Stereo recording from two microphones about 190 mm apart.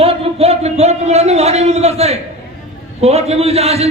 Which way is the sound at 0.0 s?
30° right (ahead or behind).